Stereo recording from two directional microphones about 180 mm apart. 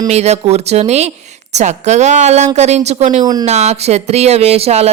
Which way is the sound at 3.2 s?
20° right (ahead or behind).